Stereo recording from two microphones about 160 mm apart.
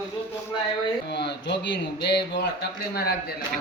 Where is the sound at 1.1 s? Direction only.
90° left.